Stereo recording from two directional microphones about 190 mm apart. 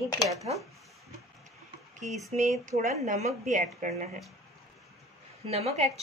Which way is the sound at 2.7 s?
45° right (ahead or behind).